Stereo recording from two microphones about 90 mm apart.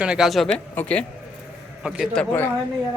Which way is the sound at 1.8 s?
10° right (ahead or behind).